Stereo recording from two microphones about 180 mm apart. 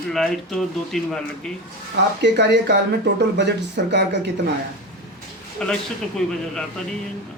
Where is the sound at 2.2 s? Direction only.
70° right (ahead or behind).